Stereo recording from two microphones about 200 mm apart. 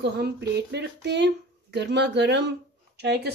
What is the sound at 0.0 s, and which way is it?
Speech, 55° right (ahead or behind).